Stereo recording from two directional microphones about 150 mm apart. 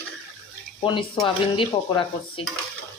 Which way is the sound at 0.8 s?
35° left (ahead or behind).